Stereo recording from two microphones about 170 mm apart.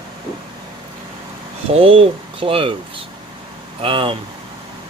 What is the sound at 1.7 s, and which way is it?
Speech, 35° right (ahead or behind).